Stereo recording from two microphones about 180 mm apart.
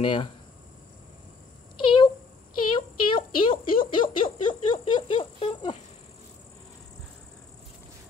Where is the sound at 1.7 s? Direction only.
30° left (ahead or behind).